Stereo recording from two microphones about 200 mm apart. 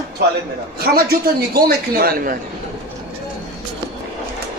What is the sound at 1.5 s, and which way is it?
Speech, 50° right (ahead or behind).